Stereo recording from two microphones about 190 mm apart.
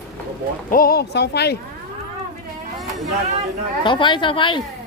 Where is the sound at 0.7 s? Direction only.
50° left (ahead or behind).